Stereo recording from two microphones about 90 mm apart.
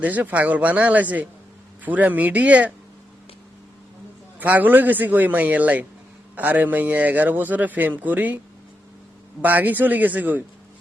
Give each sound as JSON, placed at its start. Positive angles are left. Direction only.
{"t": 0.0, "sound": "speech", "side_deg": -20}
{"t": 4.4, "sound": "a man's voice", "side_deg": -20}
{"t": 9.4, "sound": "a man's voice", "side_deg": -20}